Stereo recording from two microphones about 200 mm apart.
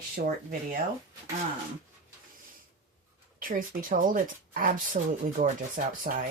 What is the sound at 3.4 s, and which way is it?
Speech, 45° right (ahead or behind).